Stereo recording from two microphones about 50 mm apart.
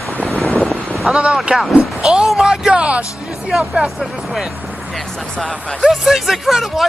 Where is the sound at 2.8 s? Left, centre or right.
Right.